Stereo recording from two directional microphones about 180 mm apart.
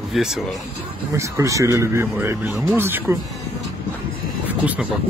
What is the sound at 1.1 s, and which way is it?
Speech, 15° right (ahead or behind).